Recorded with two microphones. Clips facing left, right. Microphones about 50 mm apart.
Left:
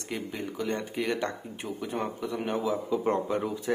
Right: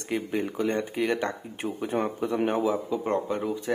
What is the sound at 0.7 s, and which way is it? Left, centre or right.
Speech, centre.